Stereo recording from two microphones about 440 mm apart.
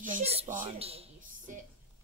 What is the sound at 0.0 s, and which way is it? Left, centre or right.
Speech, centre.